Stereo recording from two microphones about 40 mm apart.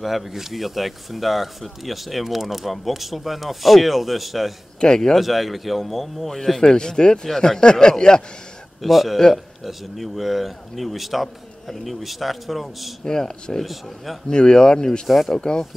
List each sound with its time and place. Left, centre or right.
0.0 s speech: centre
4.7 s speech: centre
5.1 s speech: centre
8.8 s speech: centre
13.0 s speech: centre
15.0 s speech: centre
15.3 s speech: centre